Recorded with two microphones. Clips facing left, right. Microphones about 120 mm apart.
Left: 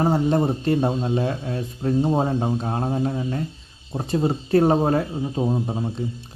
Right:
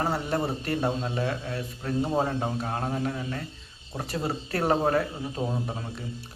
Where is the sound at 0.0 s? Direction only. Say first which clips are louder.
Left 8 dB; 25° left (ahead or behind).